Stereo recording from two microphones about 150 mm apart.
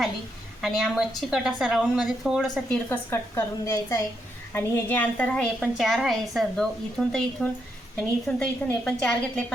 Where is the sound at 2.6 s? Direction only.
15° left (ahead or behind).